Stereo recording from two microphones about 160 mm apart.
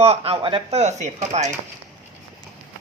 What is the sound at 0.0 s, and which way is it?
Speech, 40° right (ahead or behind).